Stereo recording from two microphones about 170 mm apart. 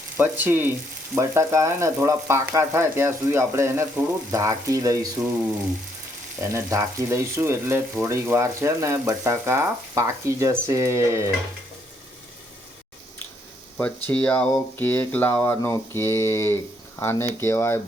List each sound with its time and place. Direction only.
0.2 s speech: 10° right (ahead or behind)
6.4 s speech: 15° right (ahead or behind)
14.1 s speech: 10° left (ahead or behind)